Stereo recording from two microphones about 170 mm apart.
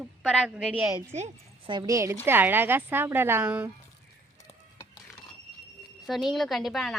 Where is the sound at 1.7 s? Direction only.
25° right (ahead or behind).